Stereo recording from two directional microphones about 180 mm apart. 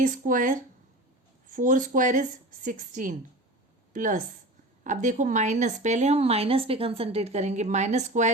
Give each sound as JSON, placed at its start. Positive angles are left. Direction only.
{"t": 0.0, "sound": "speech", "side_deg": -45}